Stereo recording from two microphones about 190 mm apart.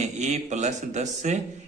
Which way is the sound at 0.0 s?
40° right (ahead or behind).